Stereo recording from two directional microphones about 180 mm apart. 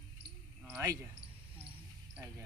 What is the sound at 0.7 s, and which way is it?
Speech, 15° right (ahead or behind).